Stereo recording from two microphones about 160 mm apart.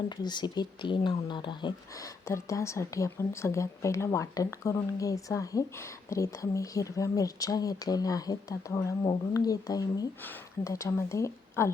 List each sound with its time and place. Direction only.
0.2 s speech: 25° left (ahead or behind)
2.2 s speech: 20° left (ahead or behind)